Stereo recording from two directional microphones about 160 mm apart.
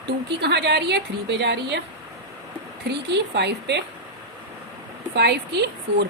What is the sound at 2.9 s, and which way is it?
Speech, 90° right.